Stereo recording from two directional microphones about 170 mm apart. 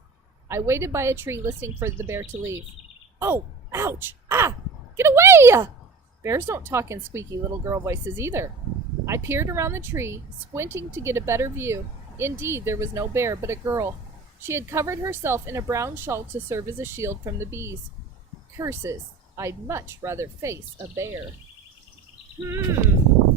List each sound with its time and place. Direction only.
0.4 s a woman's voice: 15° right (ahead or behind)